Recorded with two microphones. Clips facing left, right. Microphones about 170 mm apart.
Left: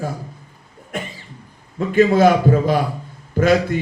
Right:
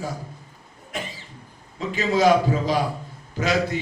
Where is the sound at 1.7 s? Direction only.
55° left (ahead or behind).